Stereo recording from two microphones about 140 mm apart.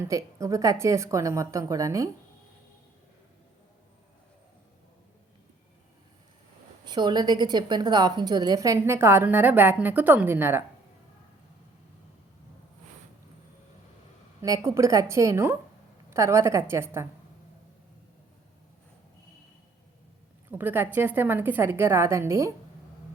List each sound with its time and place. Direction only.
0.1 s a woman's voice: 20° right (ahead or behind)
6.8 s a woman's voice: 30° right (ahead or behind); by 10.6 s 15° right (ahead or behind)
14.4 s a woman's voice: 25° right (ahead or behind)
20.5 s a woman's voice: 15° right (ahead or behind)